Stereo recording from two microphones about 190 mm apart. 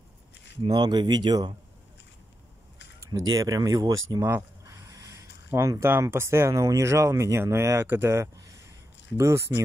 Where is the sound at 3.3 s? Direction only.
20° right (ahead or behind).